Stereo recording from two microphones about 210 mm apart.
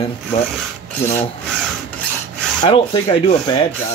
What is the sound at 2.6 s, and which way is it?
Rub, 25° left (ahead or behind).